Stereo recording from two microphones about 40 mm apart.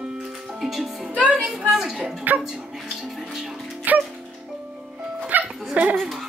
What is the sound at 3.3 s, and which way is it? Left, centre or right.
Music, centre.